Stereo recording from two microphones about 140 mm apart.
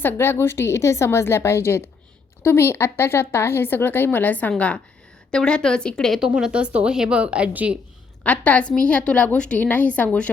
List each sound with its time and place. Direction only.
0.0 s speech: 15° left (ahead or behind); by 7.8 s 10° right (ahead or behind)
8.2 s speech: 10° left (ahead or behind)